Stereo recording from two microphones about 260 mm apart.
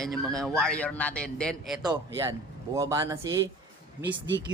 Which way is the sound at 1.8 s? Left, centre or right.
Centre.